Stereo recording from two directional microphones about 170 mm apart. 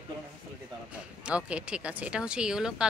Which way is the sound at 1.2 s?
5° right (ahead or behind).